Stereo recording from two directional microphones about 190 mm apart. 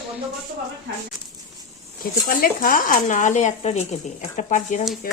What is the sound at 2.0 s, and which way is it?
Speech, 50° left (ahead or behind).